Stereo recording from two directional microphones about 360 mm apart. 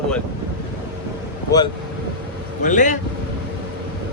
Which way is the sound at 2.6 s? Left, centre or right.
Left.